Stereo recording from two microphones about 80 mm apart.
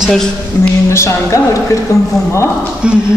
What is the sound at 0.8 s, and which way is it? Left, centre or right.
Speech, left.